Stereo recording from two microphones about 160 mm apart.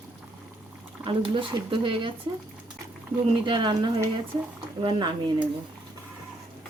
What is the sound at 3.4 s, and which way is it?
Speech, 30° right (ahead or behind).